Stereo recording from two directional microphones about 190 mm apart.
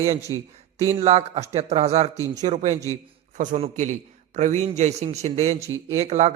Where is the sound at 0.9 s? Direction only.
35° right (ahead or behind).